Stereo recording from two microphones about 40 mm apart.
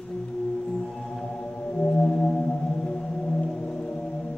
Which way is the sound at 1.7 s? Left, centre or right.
Left.